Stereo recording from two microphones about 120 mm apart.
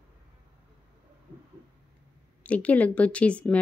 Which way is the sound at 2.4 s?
10° left (ahead or behind).